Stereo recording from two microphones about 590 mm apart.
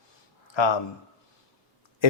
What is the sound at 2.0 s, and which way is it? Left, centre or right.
Speech, left.